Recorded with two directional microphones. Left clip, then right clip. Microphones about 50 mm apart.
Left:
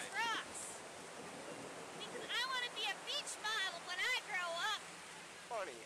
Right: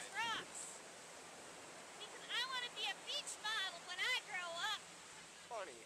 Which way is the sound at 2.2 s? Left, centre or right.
Centre.